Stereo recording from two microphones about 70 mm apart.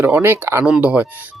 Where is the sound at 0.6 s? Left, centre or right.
Centre.